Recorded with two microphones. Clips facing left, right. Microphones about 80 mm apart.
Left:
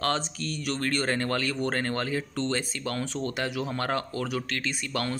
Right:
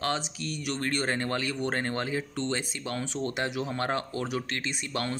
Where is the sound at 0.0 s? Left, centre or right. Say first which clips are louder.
Left 2 dB; centre.